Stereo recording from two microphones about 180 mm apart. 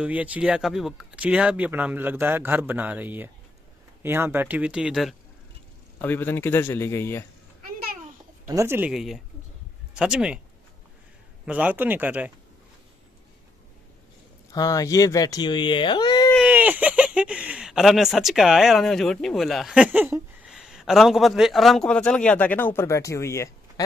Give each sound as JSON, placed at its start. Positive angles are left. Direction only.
{"t": 0.0, "sound": "speech", "side_deg": -5}
{"t": 5.9, "sound": "speech", "side_deg": 10}
{"t": 8.5, "sound": "speech", "side_deg": -15}
{"t": 11.4, "sound": "speech", "side_deg": -10}
{"t": 14.5, "sound": "speech", "side_deg": 20}
{"t": 16.3, "sound": "speech", "side_deg": -10}